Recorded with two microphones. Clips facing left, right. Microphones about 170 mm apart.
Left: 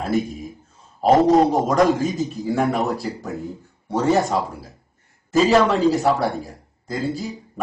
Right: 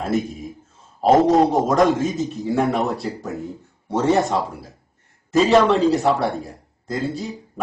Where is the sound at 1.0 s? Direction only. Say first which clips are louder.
Even; centre (ahead or behind).